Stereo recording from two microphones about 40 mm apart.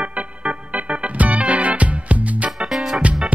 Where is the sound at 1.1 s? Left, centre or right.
Right.